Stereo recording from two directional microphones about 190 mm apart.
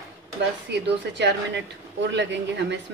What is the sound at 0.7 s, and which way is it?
Speech, 65° right (ahead or behind).